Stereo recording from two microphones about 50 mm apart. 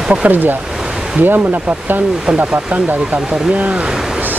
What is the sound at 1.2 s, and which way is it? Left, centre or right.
Speech, right.